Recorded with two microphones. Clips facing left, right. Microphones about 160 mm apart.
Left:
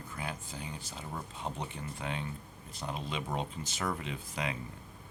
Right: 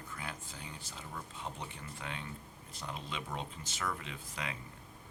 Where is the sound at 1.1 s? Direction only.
35° left (ahead or behind).